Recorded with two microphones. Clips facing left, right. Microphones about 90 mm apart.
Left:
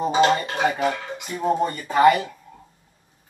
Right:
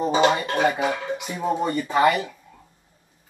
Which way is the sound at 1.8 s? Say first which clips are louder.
Left 1 dB; centre (ahead or behind).